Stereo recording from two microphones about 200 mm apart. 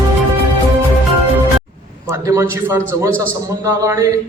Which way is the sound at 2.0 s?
15° right (ahead or behind).